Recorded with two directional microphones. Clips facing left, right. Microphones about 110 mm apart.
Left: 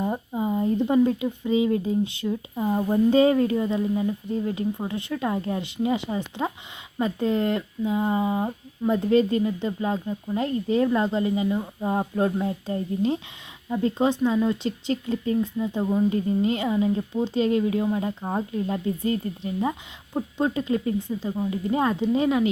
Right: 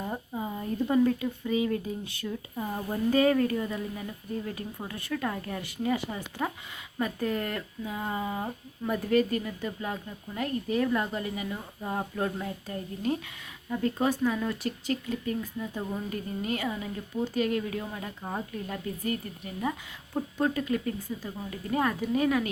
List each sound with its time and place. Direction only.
0.0 s speech: 20° left (ahead or behind)